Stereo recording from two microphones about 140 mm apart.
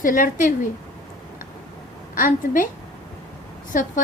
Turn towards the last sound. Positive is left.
turn(degrees=70)  # may be behind; listen again after turning